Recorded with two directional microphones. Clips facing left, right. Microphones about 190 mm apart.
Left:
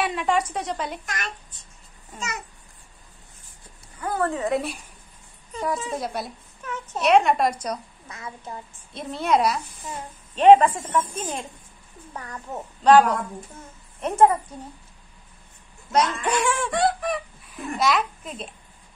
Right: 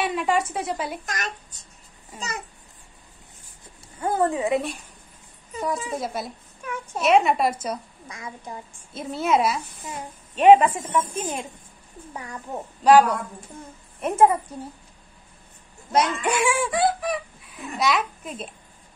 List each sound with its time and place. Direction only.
0.0 s speech: centre (ahead or behind)
1.0 s a child's voice: 40° right (ahead or behind)
4.0 s a woman's voice: 20° right (ahead or behind)
5.5 s a woman's voice: centre (ahead or behind)
8.9 s a woman's voice: 5° right (ahead or behind)
15.9 s speech: 10° right (ahead or behind)